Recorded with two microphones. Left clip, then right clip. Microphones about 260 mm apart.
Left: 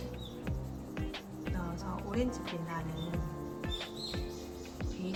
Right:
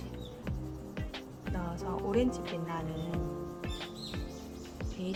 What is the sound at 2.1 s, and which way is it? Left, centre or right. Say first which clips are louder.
Speech: right 5 dB; right.